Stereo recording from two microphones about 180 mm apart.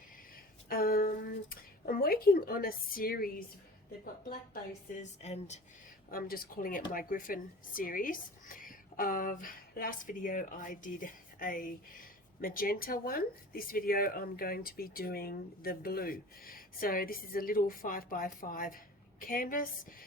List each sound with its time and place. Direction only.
0.3 s a sound: 55° left (ahead or behind)
5.2 s speech: 35° left (ahead or behind)
6.1 s a woman's voice: 55° left (ahead or behind)